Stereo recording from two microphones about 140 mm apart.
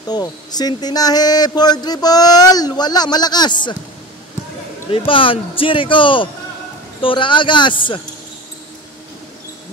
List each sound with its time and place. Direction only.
0.1 s speech: 30° left (ahead or behind)
4.9 s a man's voice: 40° left (ahead or behind)